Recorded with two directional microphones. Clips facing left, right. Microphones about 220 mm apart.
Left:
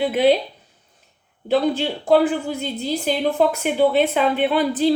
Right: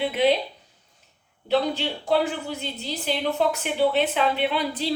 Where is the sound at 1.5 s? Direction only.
50° left (ahead or behind).